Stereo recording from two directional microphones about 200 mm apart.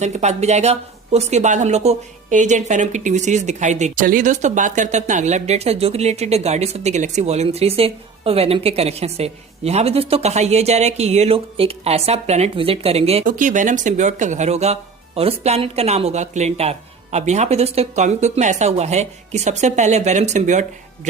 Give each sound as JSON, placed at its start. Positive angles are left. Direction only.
{"t": 0.0, "sound": "speech", "side_deg": -35}